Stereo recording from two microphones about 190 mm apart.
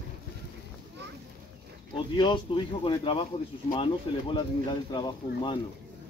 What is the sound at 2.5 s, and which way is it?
Speech, 30° left (ahead or behind).